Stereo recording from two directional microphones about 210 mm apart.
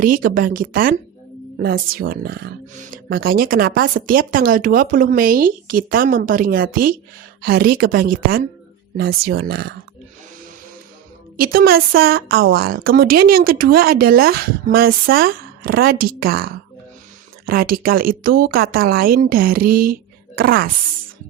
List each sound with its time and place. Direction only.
0.0 s speech: 40° right (ahead or behind)
11.3 s speech: 45° right (ahead or behind)